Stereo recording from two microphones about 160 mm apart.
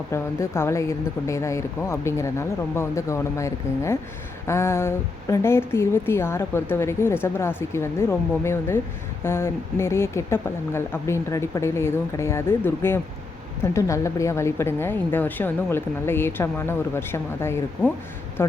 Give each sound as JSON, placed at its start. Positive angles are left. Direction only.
{"t": 0.1, "sound": "a woman's voice", "side_deg": 15}